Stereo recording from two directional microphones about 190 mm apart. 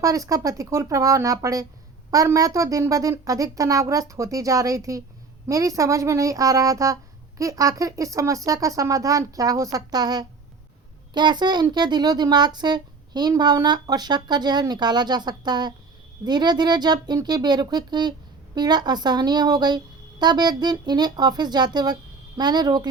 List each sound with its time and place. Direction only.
0.0 s speech: 15° right (ahead or behind)